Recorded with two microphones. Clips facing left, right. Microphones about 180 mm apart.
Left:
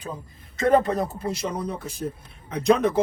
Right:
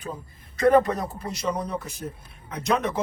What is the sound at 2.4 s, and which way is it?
Speech, 30° left (ahead or behind).